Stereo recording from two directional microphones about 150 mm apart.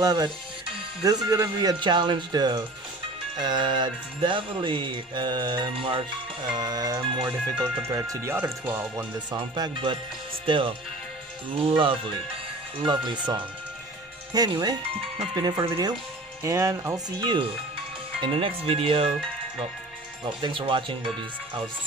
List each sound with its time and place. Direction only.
0.0 s speech: 25° right (ahead or behind)
3.3 s music: 30° right (ahead or behind)
6.5 s speech: 25° right (ahead or behind)
7.9 s speech: 20° right (ahead or behind)
9.3 s music: 30° right (ahead or behind)
12.8 s speech: 30° right (ahead or behind)
18.2 s music: 35° right (ahead or behind)
20.2 s music: 35° right (ahead or behind)